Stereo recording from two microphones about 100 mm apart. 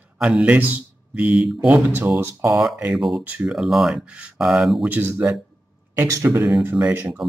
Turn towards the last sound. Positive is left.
turn(degrees=-20)  # may be behind; listen again after turning